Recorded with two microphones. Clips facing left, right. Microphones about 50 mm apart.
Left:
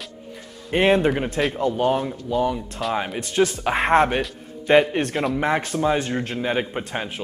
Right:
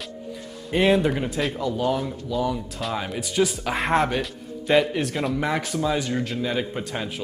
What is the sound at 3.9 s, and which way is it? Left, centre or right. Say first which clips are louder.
Speech: left 4 dB; left.